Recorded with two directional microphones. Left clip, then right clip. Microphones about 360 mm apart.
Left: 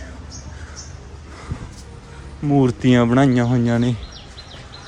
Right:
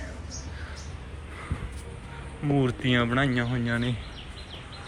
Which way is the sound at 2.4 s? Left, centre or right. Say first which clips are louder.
Left 9 dB; centre.